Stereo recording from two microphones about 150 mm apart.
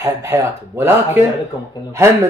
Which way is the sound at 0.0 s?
20° right (ahead or behind).